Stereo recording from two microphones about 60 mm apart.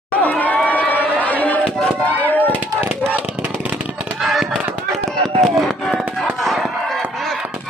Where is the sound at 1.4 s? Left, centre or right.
Left.